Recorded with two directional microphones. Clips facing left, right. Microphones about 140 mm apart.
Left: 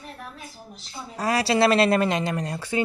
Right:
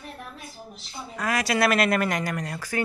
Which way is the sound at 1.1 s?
35° left (ahead or behind).